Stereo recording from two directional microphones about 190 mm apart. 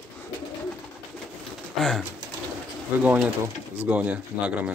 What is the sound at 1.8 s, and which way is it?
Speech, centre (ahead or behind).